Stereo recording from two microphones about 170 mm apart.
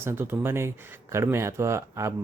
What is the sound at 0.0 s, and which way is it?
Speech, 15° right (ahead or behind).